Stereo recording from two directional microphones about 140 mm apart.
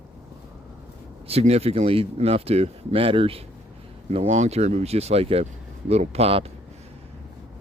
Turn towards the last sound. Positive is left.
turn(degrees=-45)  # may be behind; listen again after turning